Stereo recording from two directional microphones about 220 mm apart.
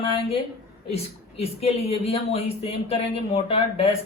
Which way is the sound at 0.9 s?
25° left (ahead or behind).